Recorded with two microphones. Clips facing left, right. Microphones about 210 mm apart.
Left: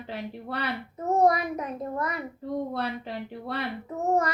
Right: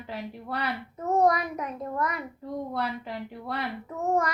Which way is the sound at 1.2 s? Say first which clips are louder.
Left 2 dB; 30° left (ahead or behind).